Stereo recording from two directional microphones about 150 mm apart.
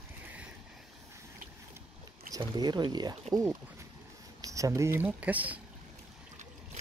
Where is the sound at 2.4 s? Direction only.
30° right (ahead or behind).